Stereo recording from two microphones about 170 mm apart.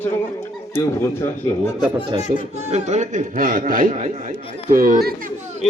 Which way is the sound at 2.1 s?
45° left (ahead or behind).